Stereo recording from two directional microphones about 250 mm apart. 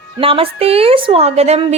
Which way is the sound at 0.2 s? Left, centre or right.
Right.